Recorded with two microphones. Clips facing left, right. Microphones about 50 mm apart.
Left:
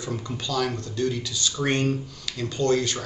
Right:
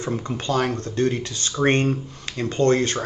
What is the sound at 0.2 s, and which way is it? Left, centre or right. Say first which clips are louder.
Speech: right 3 dB; right.